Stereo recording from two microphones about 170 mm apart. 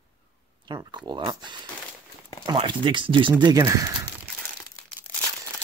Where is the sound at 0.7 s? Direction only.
25° right (ahead or behind).